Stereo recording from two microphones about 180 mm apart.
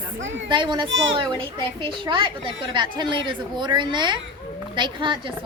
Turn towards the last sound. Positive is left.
turn(degrees=-25)  # may be behind; listen again after turning